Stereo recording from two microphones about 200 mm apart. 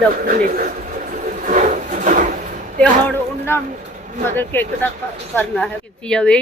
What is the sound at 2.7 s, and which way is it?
A man's voice, 5° left (ahead or behind).